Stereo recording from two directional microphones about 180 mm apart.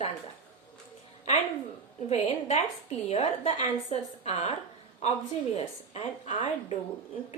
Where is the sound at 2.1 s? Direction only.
35° left (ahead or behind).